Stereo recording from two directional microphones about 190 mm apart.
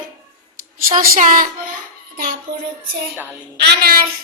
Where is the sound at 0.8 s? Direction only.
50° right (ahead or behind).